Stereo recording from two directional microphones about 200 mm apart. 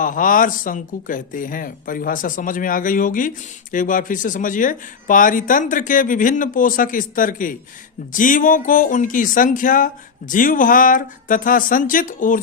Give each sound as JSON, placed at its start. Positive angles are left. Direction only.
{"t": 0.0, "sound": "speech", "side_deg": 40}